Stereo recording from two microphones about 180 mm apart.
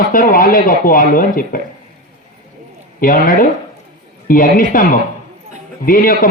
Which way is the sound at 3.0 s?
50° left (ahead or behind).